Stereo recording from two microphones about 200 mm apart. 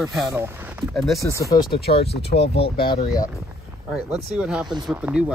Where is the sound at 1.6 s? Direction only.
50° left (ahead or behind).